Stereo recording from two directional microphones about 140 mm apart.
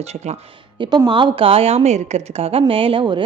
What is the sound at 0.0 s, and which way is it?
Speech, 50° right (ahead or behind).